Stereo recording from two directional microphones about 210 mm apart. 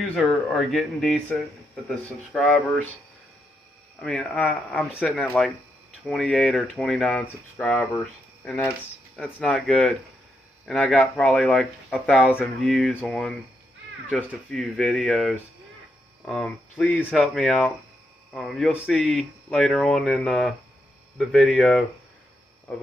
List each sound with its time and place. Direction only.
0.1 s speech: centre (ahead or behind)
4.0 s speech: centre (ahead or behind)